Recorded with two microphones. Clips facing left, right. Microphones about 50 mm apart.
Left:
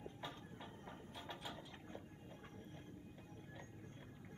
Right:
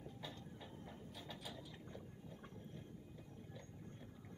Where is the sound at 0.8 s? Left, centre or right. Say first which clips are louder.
Left 3 dB; left.